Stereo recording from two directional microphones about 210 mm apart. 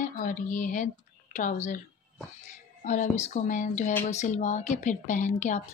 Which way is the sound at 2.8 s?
35° left (ahead or behind).